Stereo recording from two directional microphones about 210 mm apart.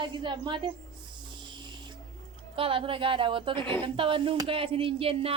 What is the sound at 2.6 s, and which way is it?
Speech, 25° right (ahead or behind).